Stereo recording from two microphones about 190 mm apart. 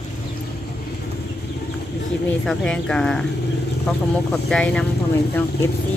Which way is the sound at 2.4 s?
5° left (ahead or behind).